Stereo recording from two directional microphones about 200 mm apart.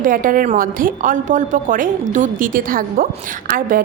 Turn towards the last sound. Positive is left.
turn(degrees=-45)  # may be behind; listen again after turning